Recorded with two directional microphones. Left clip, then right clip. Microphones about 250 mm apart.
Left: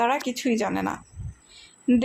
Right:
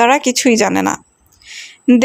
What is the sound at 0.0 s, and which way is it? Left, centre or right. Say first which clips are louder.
A woman's voice: right 12 dB; right.